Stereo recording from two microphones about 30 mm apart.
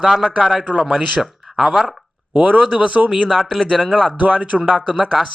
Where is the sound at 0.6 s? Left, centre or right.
Right.